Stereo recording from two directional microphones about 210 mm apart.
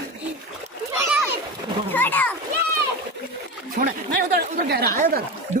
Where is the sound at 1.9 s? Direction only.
10° left (ahead or behind).